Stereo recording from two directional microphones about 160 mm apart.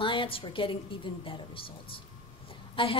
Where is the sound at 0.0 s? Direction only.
35° left (ahead or behind).